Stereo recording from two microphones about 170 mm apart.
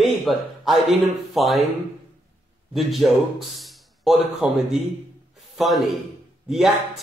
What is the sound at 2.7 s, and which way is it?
Speech, centre (ahead or behind).